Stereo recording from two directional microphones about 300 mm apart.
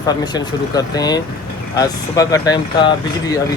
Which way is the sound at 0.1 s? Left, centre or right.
Centre.